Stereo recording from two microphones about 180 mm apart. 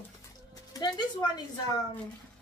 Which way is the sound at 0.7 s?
25° left (ahead or behind).